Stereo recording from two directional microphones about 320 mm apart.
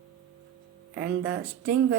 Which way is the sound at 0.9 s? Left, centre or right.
Right.